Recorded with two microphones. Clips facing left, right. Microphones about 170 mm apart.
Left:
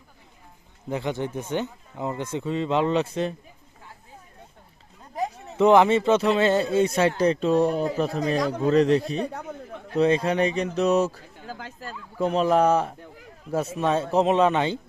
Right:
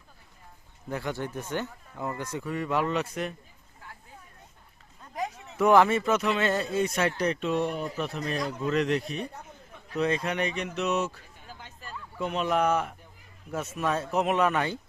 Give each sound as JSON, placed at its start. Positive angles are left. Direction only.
{"t": 0.9, "sound": "speech", "side_deg": 20}
{"t": 5.5, "sound": "speech", "side_deg": 20}
{"t": 8.4, "sound": "speech", "side_deg": 90}
{"t": 8.6, "sound": "speech", "side_deg": 35}
{"t": 9.2, "sound": "a sound", "side_deg": 75}
{"t": 9.9, "sound": "speech", "side_deg": 30}
{"t": 11.3, "sound": "speech", "side_deg": 90}
{"t": 12.2, "sound": "speech", "side_deg": 35}